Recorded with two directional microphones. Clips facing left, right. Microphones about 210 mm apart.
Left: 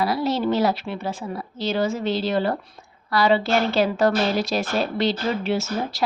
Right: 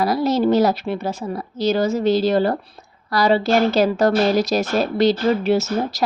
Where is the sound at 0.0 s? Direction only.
40° right (ahead or behind).